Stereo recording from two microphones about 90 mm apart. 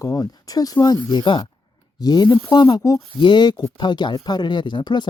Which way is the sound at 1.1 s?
60° left (ahead or behind).